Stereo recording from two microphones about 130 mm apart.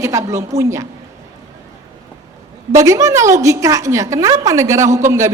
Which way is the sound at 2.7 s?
25° right (ahead or behind).